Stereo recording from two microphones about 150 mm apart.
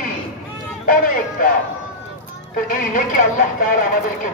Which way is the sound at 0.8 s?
65° left (ahead or behind).